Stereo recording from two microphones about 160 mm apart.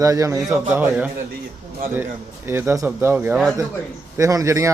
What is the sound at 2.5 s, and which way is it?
Speech, 15° right (ahead or behind).